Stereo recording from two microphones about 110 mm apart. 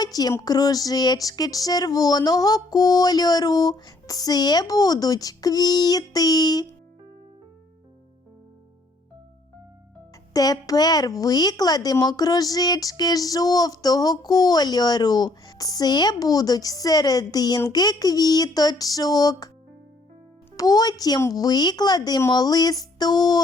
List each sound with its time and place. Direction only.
0.0 s a woman's voice: 35° left (ahead or behind)
10.3 s a woman's voice: 35° left (ahead or behind)
20.6 s a woman's voice: 35° left (ahead or behind)